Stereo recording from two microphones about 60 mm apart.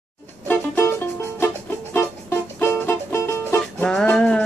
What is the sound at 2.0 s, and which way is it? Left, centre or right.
Music, left.